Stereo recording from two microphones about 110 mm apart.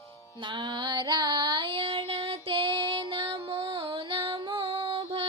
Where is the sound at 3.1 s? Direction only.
55° right (ahead or behind).